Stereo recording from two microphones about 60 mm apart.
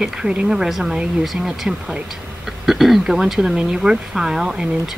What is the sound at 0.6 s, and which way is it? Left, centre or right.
Speech, centre.